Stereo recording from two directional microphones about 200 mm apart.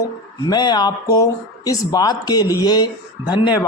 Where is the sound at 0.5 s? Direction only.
20° left (ahead or behind).